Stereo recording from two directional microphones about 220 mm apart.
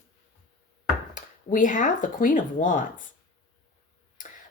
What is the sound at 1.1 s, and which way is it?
Speech, 35° left (ahead or behind).